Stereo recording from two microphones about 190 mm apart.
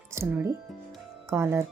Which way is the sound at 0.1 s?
10° right (ahead or behind).